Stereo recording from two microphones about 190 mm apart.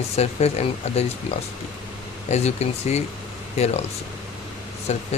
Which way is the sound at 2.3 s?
35° left (ahead or behind).